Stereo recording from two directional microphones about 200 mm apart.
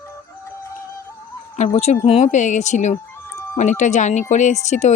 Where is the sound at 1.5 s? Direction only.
35° left (ahead or behind).